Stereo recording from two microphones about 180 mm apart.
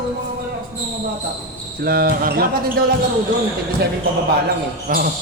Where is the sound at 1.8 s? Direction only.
55° right (ahead or behind).